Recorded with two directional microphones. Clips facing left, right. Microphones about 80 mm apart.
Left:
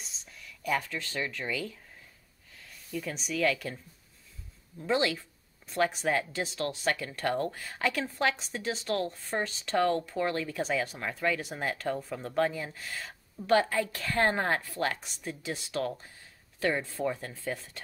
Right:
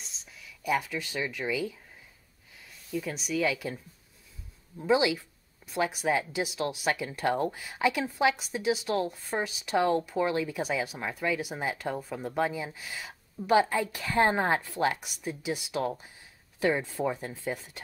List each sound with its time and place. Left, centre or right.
0.0 s speech: centre
2.9 s speech: centre
4.8 s speech: centre